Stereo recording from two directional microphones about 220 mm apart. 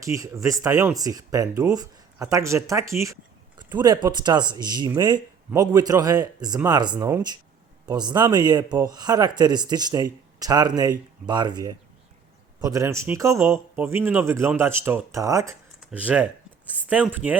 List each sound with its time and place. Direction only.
0.0 s speech: 15° right (ahead or behind)